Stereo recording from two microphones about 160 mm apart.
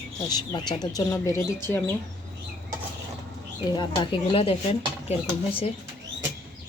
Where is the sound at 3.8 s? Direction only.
35° left (ahead or behind).